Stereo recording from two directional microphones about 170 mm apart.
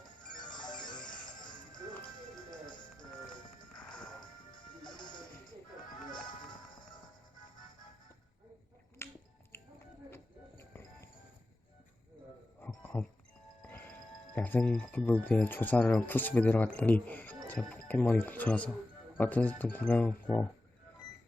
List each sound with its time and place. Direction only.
0.3 s music: 25° left (ahead or behind)
2.0 s music: 5° left (ahead or behind)
3.7 s music: 5° left (ahead or behind)
4.8 s music: 25° left (ahead or behind)
9.0 s finger snapping: 15° left (ahead or behind)
9.5 s a sound: 15° left (ahead or behind)
10.6 s music: 15° left (ahead or behind)
12.5 s music: 10° left (ahead or behind)
14.3 s speech: 10° left (ahead or behind)